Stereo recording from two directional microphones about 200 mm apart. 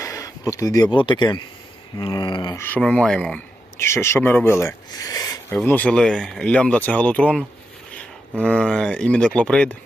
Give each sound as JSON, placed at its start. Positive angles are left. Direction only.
{"t": 0.0, "sound": "speech", "side_deg": 15}
{"t": 2.0, "sound": "a sound", "side_deg": 25}
{"t": 2.6, "sound": "speech", "side_deg": 10}